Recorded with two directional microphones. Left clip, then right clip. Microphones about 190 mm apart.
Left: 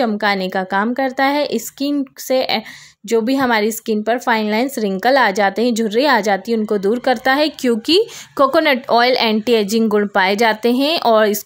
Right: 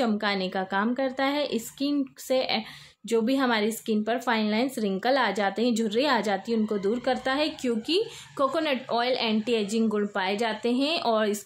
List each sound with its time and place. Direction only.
0.0 s a woman's voice: 40° left (ahead or behind)